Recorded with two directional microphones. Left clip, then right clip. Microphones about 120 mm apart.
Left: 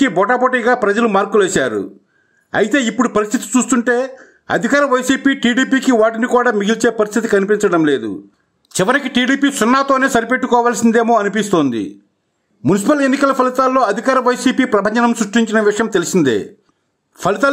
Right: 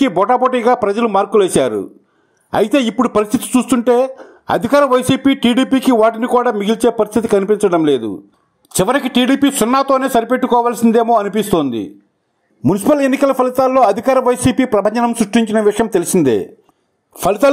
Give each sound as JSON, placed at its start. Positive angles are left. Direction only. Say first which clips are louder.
{"t": 0.0, "sound": "a man's voice", "louder": "right 1 dB", "side_deg": -30}
{"t": 12.7, "sound": "speech", "louder": "right 1 dB", "side_deg": -25}
{"t": 17.2, "sound": "speech", "louder": "right 2 dB", "side_deg": -25}